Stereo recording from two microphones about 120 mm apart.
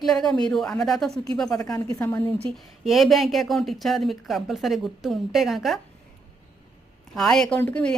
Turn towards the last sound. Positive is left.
turn(degrees=10)  # may be behind; listen again after turning